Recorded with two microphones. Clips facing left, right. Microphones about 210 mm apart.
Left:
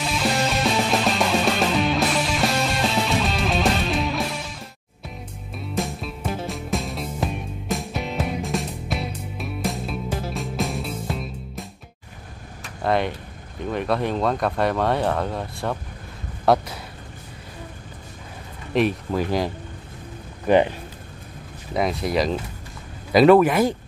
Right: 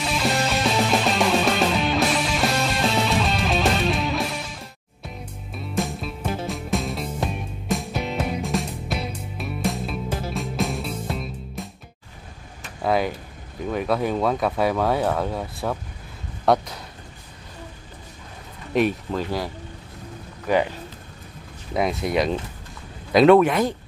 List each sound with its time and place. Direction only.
0.0 s music: centre (ahead or behind)
12.6 s a sound: centre (ahead or behind)
13.7 s speech: centre (ahead or behind)
18.7 s speech: centre (ahead or behind)
19.1 s speech: 15° left (ahead or behind)
21.7 s speech: centre (ahead or behind)